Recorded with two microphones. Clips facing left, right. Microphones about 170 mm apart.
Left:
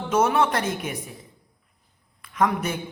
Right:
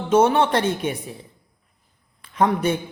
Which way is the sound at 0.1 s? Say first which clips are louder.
Right 4 dB; 30° right (ahead or behind).